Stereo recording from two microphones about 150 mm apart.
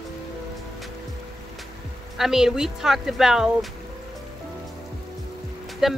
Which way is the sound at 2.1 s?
Centre (ahead or behind).